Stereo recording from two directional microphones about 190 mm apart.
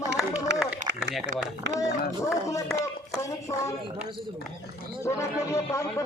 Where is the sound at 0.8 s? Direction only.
40° right (ahead or behind).